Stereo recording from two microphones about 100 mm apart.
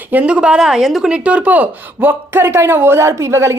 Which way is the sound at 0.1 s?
15° right (ahead or behind).